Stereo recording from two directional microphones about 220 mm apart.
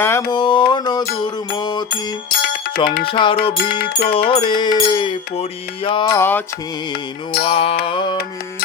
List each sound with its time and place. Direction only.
0.0 s mantra: 10° left (ahead or behind)
1.5 s music: 20° left (ahead or behind)
2.3 s music: 45° left (ahead or behind)
3.1 s mantra: 25° left (ahead or behind)
3.6 s a sound: 45° left (ahead or behind)
4.3 s mantra: 20° left (ahead or behind)
6.1 s music: 10° left (ahead or behind)
7.4 s mantra: 25° left (ahead or behind)